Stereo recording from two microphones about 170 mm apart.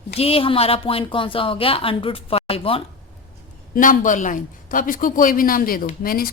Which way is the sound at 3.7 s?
50° left (ahead or behind).